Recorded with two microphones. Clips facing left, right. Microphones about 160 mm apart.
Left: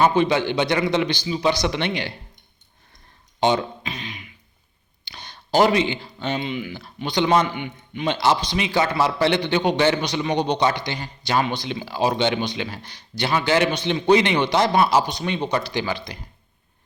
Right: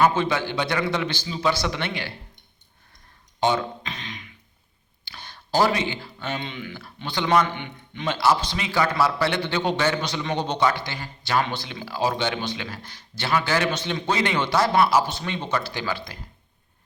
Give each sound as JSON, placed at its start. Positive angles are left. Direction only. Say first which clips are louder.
{"t": 0.0, "sound": "a man's voice", "louder": "left 3 dB", "side_deg": 20}
{"t": 3.8, "sound": "beatboxing", "louder": "left 3 dB", "side_deg": 10}
{"t": 5.0, "sound": "a sound", "louder": "left 1 dB", "side_deg": 20}
{"t": 6.4, "sound": "a man's voice", "louder": "left 6 dB", "side_deg": 10}
{"t": 7.4, "sound": "a man's voice", "louder": "left 3 dB", "side_deg": 10}
{"t": 8.1, "sound": "a man's voice", "louder": "left 1 dB", "side_deg": 20}